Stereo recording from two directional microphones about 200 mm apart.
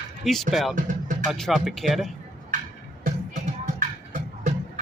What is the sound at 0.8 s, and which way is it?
Music, 40° right (ahead or behind).